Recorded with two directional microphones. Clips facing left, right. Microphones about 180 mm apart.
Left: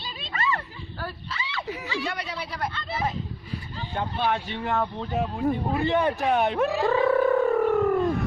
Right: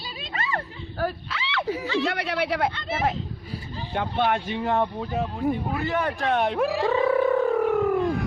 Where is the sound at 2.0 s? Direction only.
65° right (ahead or behind).